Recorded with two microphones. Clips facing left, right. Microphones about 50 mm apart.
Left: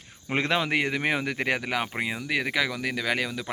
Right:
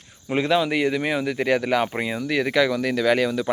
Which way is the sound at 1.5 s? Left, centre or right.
Centre.